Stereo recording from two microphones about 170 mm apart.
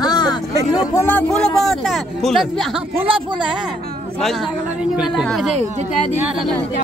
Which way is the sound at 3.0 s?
30° right (ahead or behind).